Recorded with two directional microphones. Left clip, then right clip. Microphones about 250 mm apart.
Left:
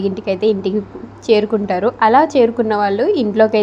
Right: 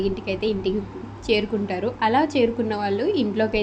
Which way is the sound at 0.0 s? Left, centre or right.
Centre.